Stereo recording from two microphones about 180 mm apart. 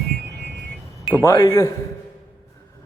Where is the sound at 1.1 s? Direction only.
15° left (ahead or behind).